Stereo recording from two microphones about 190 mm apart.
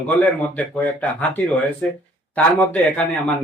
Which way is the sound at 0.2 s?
10° left (ahead or behind).